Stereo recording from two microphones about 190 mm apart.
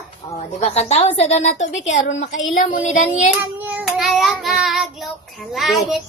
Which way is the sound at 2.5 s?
45° left (ahead or behind).